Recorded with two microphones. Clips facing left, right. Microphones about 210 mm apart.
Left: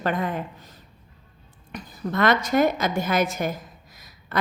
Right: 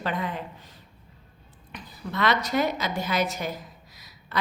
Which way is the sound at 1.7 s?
50° left (ahead or behind).